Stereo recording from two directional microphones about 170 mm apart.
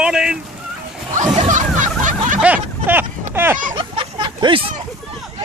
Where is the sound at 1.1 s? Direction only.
45° right (ahead or behind).